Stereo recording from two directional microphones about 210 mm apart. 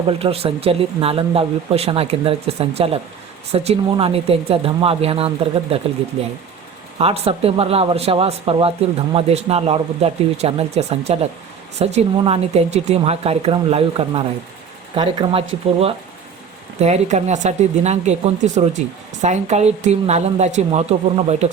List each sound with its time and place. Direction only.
0.1 s speech: 30° right (ahead or behind)
7.0 s speech: 30° right (ahead or behind)
16.8 s a woman's voice: 30° right (ahead or behind)